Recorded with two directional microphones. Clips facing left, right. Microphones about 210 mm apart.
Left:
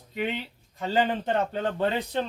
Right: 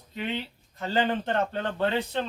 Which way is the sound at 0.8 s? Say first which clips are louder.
Left 1 dB; 10° left (ahead or behind).